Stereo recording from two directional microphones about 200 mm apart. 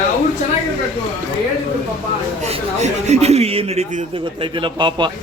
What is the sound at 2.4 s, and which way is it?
Speech, 35° right (ahead or behind).